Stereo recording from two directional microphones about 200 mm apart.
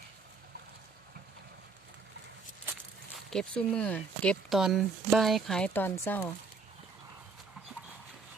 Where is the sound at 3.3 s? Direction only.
5° left (ahead or behind).